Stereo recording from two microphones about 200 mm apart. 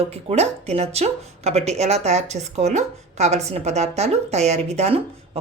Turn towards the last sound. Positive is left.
turn(degrees=-30)  # may be behind; listen again after turning